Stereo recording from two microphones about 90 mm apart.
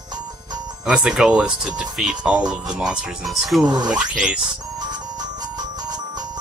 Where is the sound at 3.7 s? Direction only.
10° right (ahead or behind).